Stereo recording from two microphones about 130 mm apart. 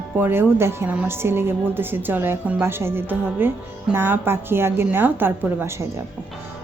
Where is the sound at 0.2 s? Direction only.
15° right (ahead or behind).